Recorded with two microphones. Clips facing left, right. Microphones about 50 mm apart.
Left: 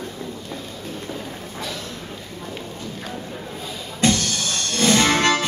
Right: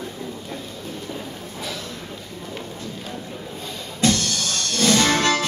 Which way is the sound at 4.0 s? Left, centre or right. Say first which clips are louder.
Left 1 dB; left.